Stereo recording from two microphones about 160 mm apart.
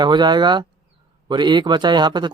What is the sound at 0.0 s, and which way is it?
Speech, 25° right (ahead or behind).